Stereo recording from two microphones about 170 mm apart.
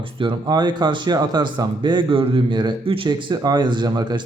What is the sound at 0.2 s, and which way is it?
Speech, 25° right (ahead or behind).